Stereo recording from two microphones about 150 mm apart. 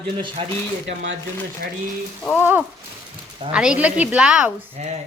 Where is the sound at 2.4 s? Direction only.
15° right (ahead or behind).